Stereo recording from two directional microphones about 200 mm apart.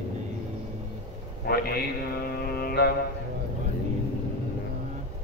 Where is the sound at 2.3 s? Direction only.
50° left (ahead or behind).